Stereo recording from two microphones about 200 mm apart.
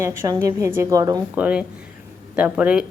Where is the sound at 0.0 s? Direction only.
10° right (ahead or behind).